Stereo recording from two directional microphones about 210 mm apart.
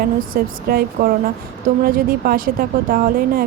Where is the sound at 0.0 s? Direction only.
45° right (ahead or behind).